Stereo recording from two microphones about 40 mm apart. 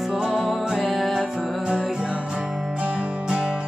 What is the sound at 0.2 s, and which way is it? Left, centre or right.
Music, centre.